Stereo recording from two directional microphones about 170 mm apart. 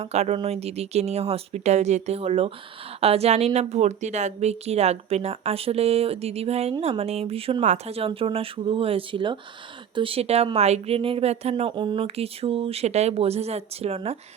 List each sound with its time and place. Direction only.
0.0 s a woman's voice: 40° right (ahead or behind)